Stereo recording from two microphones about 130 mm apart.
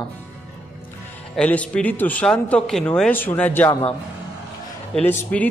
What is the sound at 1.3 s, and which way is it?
Speech, 10° left (ahead or behind).